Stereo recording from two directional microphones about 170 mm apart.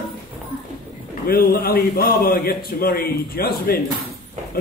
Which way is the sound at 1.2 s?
60° left (ahead or behind).